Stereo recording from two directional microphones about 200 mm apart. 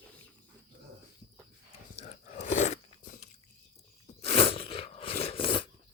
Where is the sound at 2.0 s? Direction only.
35° left (ahead or behind).